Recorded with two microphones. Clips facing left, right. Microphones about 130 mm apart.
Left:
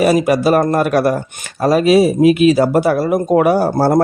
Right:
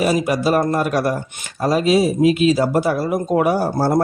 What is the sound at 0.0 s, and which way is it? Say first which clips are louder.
Speech: left 5 dB; 65° left (ahead or behind).